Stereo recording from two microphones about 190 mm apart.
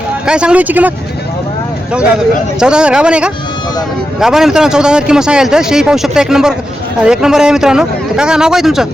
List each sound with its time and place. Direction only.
0.3 s speech: 5° right (ahead or behind)
2.6 s speech: 5° right (ahead or behind)